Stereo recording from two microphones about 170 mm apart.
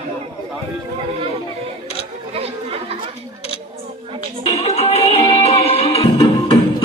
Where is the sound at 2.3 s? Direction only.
35° right (ahead or behind).